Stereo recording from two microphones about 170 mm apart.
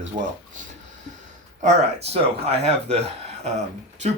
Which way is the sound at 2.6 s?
40° right (ahead or behind).